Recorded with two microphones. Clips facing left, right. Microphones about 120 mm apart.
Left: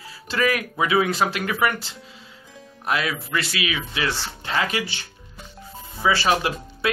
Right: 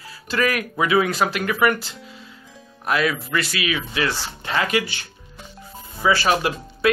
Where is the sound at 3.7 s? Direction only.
40° right (ahead or behind).